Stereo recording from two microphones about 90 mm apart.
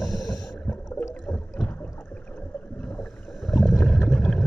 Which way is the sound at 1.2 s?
10° left (ahead or behind).